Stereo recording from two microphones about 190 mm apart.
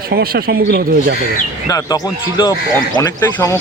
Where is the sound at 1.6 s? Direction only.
20° left (ahead or behind).